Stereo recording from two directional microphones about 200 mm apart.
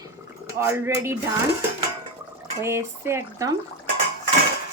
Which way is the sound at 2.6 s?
15° right (ahead or behind).